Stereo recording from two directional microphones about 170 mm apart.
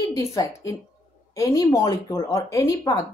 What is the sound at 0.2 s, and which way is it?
A woman's voice, 20° left (ahead or behind).